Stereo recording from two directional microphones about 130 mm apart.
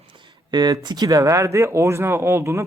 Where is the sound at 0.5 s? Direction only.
35° right (ahead or behind).